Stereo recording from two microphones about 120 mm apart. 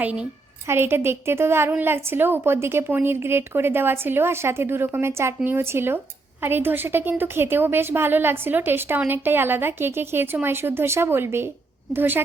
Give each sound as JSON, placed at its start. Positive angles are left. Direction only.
{"t": 0.0, "sound": "a woman's voice", "side_deg": -10}